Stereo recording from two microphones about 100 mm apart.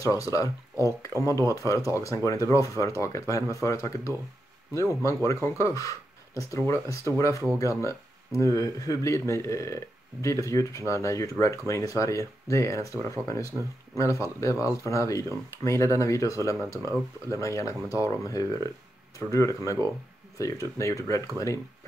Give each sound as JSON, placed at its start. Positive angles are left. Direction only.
{"t": 0.0, "sound": "speech", "side_deg": 35}